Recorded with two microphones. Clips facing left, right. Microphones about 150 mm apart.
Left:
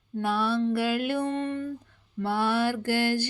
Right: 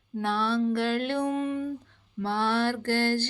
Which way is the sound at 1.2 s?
5° right (ahead or behind).